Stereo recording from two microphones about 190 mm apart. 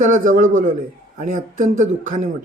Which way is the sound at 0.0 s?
45° right (ahead or behind).